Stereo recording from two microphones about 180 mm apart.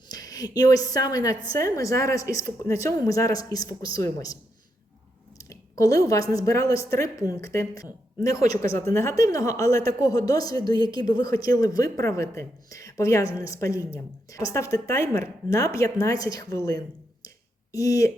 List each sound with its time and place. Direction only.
0.1 s a woman's voice: 20° left (ahead or behind)
5.4 s a woman's voice: 20° left (ahead or behind)
17.2 s a sound: 20° left (ahead or behind)